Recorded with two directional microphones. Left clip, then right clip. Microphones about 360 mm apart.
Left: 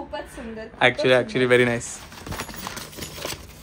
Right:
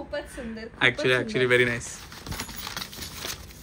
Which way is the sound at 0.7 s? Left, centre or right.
Centre.